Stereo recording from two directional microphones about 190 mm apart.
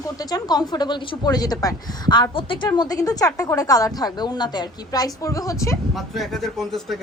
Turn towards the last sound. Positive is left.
turn(degrees=0)  # may be behind; listen again after turning